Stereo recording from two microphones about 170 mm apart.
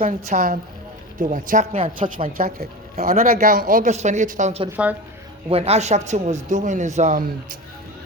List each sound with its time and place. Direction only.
0.0 s speech: 45° right (ahead or behind)